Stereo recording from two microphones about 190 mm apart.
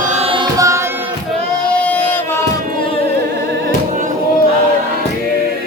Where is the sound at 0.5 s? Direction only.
15° right (ahead or behind).